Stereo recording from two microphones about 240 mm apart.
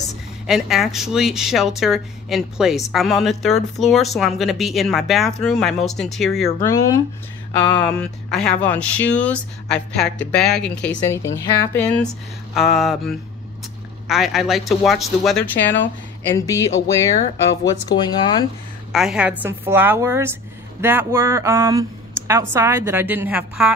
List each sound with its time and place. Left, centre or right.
0.5 s a woman's voice: centre
6.7 s speech: centre
8.0 s a woman's voice: centre
17.8 s speech: centre
18.9 s speech: centre